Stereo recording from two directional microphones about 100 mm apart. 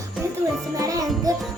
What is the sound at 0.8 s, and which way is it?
Music, 35° right (ahead or behind).